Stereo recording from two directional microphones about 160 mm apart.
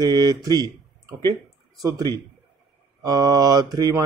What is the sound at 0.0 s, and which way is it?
Speech, 25° right (ahead or behind).